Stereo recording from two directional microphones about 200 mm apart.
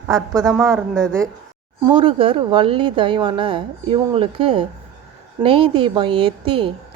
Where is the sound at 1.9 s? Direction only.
25° right (ahead or behind).